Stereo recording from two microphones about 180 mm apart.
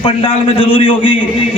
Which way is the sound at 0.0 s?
30° left (ahead or behind).